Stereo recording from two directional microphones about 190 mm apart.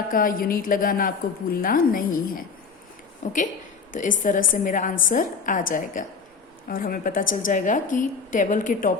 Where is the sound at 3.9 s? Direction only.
45° left (ahead or behind).